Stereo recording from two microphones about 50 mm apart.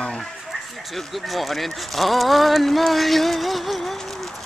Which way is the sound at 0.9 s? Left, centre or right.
Centre.